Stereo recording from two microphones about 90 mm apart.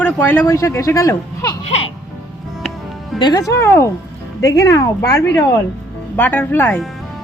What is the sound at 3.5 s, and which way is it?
A man's voice, 30° left (ahead or behind).